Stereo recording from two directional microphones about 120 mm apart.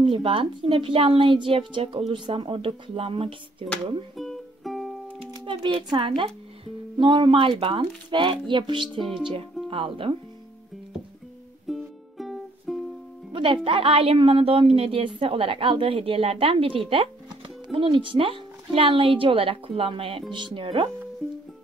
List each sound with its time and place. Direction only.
0.0 s speech: 45° right (ahead or behind)
4.2 s music: centre (ahead or behind)
5.3 s speech: 45° right (ahead or behind)
11.6 s music: centre (ahead or behind)
13.3 s speech: 45° right (ahead or behind)